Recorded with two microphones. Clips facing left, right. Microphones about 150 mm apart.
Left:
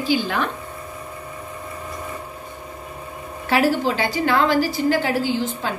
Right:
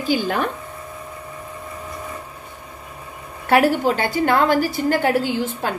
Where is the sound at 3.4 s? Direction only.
55° right (ahead or behind).